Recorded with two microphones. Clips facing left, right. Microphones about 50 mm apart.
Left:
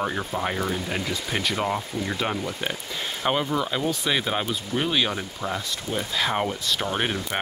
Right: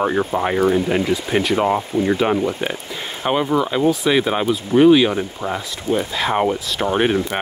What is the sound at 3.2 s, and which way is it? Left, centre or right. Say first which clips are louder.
Speech: right 6 dB; centre.